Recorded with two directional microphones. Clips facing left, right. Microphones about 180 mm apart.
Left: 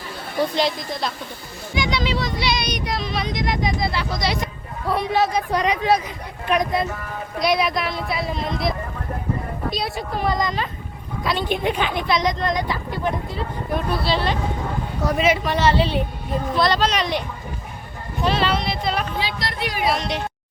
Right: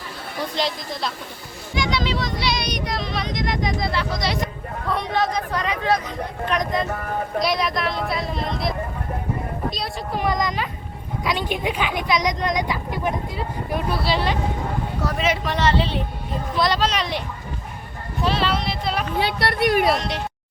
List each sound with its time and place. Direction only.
0.5 s speech: centre (ahead or behind)
1.7 s vehicle: centre (ahead or behind)
4.9 s speech: 5° left (ahead or behind)
10.2 s speech: 15° right (ahead or behind)
15.2 s speech: 5° left (ahead or behind)
16.6 s speech: 10° right (ahead or behind)
18.3 s speech: centre (ahead or behind)
19.2 s speech: 60° right (ahead or behind)
19.9 s speech: centre (ahead or behind)